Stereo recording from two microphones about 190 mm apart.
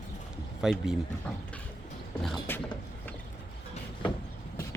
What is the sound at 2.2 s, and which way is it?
Mechanisms, 5° left (ahead or behind).